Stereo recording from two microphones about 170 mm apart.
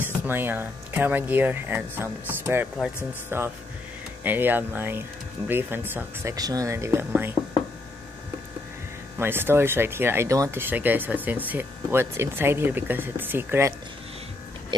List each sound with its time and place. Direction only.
0.0 s speech: 10° right (ahead or behind)
9.2 s speech: 15° right (ahead or behind)
14.7 s speech: 25° right (ahead or behind)